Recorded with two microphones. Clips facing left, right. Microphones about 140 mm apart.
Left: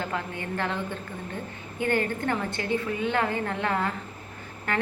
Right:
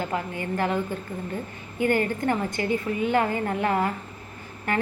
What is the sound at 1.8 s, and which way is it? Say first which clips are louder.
A woman's voice: right 3 dB; 10° right (ahead or behind).